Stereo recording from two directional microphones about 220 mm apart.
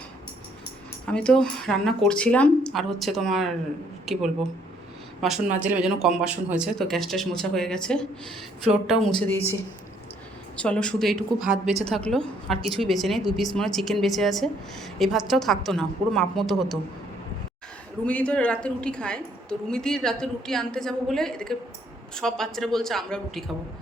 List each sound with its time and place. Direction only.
1.1 s a woman's voice: 5° left (ahead or behind)
10.6 s a woman's voice: 5° left (ahead or behind)
18.0 s a woman's voice: 5° left (ahead or behind)